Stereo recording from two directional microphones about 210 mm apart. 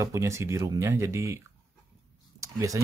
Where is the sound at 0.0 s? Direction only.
15° right (ahead or behind).